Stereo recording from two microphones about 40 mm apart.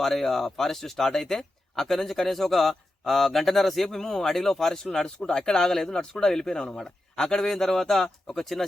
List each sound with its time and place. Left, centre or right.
0.0 s a man's voice: centre